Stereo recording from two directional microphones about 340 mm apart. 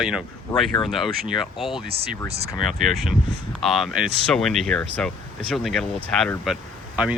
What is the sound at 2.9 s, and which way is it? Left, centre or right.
Speech, centre.